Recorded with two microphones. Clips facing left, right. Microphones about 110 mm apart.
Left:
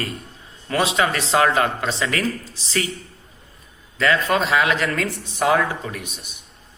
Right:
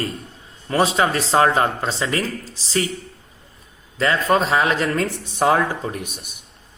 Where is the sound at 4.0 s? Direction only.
35° right (ahead or behind).